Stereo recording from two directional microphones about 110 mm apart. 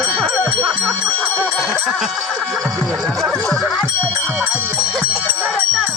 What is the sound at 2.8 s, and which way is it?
Music, 5° left (ahead or behind).